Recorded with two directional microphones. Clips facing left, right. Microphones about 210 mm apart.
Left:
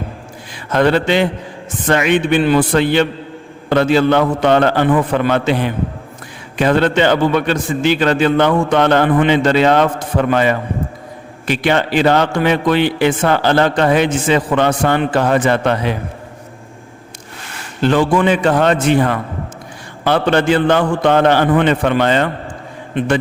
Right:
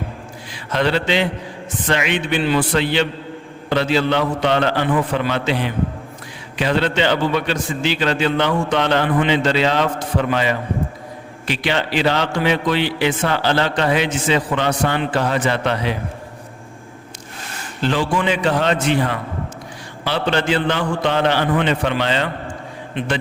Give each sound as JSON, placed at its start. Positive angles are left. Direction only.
{"t": 0.5, "sound": "mantra", "side_deg": 50}
{"t": 1.9, "sound": "a man's voice", "side_deg": 50}
{"t": 17.8, "sound": "a man's voice", "side_deg": 55}